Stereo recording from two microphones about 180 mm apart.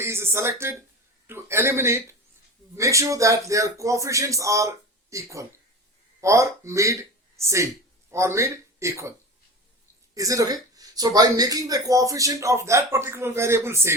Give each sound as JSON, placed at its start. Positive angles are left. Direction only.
{"t": 0.0, "sound": "speech", "side_deg": -15}
{"t": 10.2, "sound": "speech", "side_deg": -20}